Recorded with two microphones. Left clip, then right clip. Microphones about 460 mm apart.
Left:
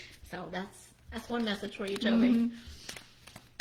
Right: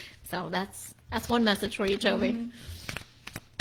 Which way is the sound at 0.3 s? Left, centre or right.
Right.